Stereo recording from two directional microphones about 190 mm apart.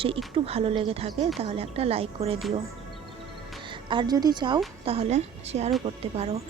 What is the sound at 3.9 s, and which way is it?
Speech, 25° right (ahead or behind).